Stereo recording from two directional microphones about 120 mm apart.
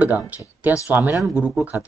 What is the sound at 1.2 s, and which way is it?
Speech, 5° right (ahead or behind).